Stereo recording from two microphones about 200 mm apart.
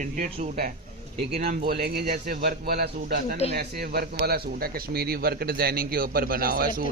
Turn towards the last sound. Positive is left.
turn(degrees=-45)  # may be behind; listen again after turning